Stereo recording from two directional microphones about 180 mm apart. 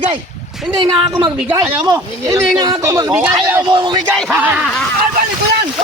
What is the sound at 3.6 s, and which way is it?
Speech, 25° right (ahead or behind).